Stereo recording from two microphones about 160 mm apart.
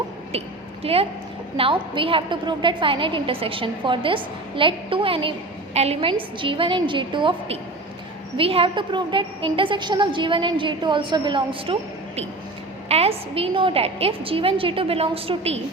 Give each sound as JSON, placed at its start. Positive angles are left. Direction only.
{"t": 0.3, "sound": "a woman's voice", "side_deg": -40}